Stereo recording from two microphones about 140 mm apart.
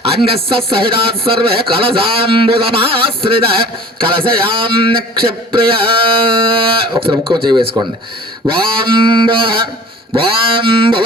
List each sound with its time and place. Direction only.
0.0 s speech: 45° right (ahead or behind)